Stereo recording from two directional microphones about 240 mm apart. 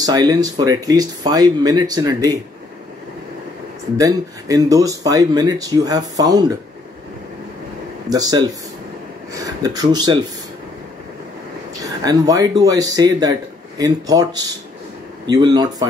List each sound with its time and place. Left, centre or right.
0.0 s a man's voice: centre
4.0 s a man's voice: centre
8.1 s a man's voice: centre
11.8 s a man's voice: centre